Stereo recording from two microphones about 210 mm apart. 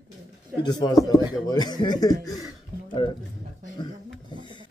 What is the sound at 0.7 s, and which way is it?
A man's voice, 20° left (ahead or behind).